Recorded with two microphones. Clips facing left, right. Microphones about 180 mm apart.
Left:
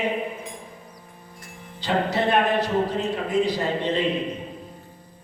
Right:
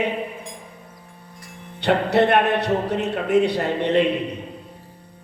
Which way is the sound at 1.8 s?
65° right (ahead or behind).